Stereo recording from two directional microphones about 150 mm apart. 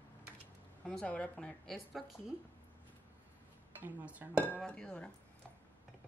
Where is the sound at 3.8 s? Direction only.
10° right (ahead or behind).